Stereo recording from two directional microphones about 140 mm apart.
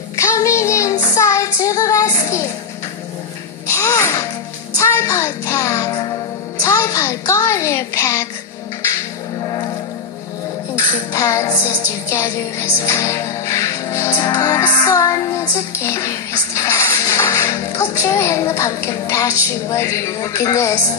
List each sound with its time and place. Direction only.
0.1 s child singing: 20° left (ahead or behind)
3.7 s babbling: 20° left (ahead or behind)
4.7 s music: 20° left (ahead or behind)
6.6 s child singing: 20° left (ahead or behind)
11.1 s music: 20° left (ahead or behind)
12.1 s speech: 20° left (ahead or behind)
14.3 s music: 20° left (ahead or behind)